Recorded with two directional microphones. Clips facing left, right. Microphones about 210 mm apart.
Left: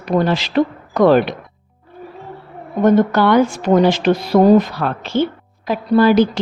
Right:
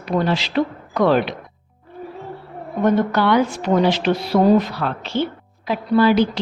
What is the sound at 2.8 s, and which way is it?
A woman's voice, 45° left (ahead or behind).